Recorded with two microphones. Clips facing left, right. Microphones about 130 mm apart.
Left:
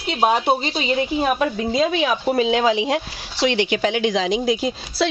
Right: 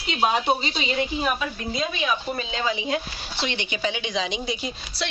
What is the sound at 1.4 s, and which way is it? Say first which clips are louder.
Speech: left 9 dB; 90° left.